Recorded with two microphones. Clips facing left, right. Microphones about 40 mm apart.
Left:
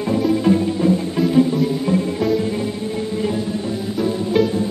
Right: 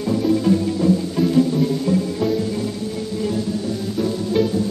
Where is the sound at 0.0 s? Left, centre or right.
Left.